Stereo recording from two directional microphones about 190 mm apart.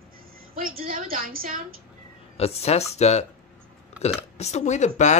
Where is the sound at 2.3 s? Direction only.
30° left (ahead or behind).